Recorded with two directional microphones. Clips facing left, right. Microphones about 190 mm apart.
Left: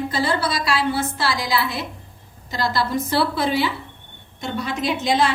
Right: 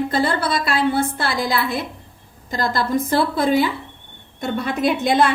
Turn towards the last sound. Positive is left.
turn(degrees=-55)  # may be behind; listen again after turning